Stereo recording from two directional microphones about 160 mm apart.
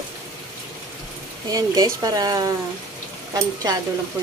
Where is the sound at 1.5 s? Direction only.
20° right (ahead or behind).